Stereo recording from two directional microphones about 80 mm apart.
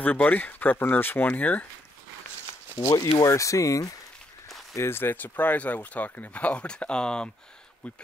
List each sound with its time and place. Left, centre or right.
0.0 s speech: left
2.9 s speech: left
4.7 s speech: left; by 8.0 s centre